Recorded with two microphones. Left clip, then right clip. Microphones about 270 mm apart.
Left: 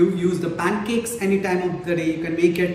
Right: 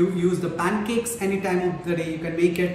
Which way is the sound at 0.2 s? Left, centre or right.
Centre.